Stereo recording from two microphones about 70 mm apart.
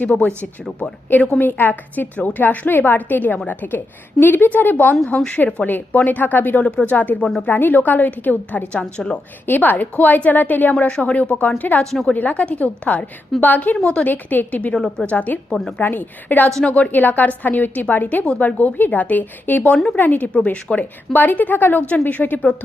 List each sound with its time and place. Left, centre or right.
0.0 s a woman's voice: centre
9.5 s a woman's voice: left
11.8 s a woman's voice: centre
12.1 s a woman's voice: left
14.8 s a woman's voice: centre
15.0 s a woman's voice: left